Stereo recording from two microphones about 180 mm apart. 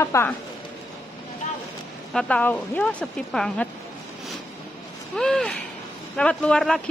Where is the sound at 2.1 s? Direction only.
5° left (ahead or behind).